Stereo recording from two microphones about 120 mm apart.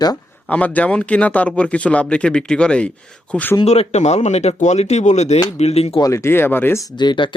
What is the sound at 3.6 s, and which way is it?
Speech, 70° left (ahead or behind).